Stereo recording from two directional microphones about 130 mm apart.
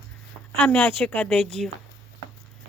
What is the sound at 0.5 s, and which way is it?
Speech, 10° left (ahead or behind).